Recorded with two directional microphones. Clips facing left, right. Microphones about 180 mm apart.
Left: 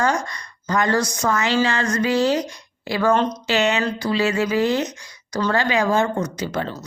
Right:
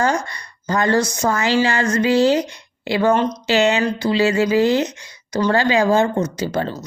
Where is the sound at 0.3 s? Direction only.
30° right (ahead or behind).